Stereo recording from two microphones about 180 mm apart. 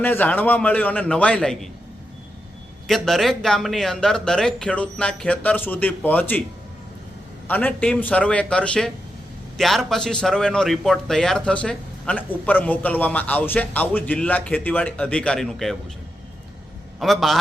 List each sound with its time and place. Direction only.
0.0 s a man's voice: 10° left (ahead or behind)
2.8 s a man's voice: centre (ahead or behind)
7.4 s a man's voice: 10° left (ahead or behind)
17.0 s a man's voice: centre (ahead or behind)